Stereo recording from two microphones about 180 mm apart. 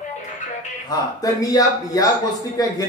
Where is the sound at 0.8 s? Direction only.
20° left (ahead or behind).